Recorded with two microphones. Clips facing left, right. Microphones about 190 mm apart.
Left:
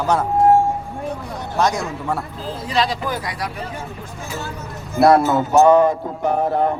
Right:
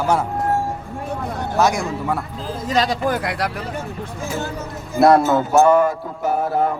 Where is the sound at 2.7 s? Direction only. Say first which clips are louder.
Right 2 dB; 45° right (ahead or behind).